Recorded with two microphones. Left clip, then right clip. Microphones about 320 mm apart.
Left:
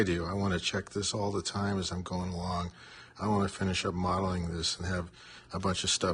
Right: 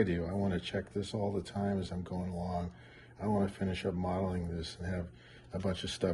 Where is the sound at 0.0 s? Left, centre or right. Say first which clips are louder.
Left 2 dB; centre.